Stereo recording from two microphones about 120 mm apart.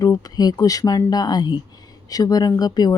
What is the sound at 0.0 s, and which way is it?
Speech, 30° left (ahead or behind).